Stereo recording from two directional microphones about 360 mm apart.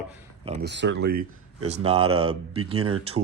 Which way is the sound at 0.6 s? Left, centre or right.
Right.